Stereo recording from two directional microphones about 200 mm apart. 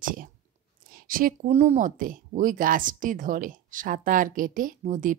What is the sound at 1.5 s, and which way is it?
Speech, 35° right (ahead or behind).